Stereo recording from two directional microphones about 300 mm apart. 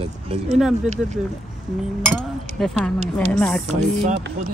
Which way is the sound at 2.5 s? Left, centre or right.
Centre.